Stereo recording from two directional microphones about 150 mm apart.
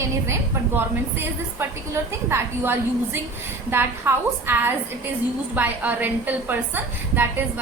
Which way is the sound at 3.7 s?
15° right (ahead or behind).